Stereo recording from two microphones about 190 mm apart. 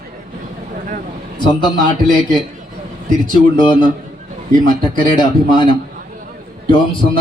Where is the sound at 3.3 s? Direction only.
25° left (ahead or behind).